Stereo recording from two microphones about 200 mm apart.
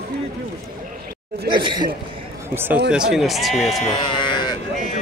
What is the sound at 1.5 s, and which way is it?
Speech, 25° right (ahead or behind).